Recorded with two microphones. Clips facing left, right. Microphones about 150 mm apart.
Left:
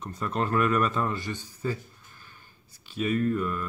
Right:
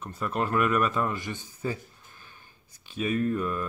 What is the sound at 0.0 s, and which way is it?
Speech, 5° right (ahead or behind).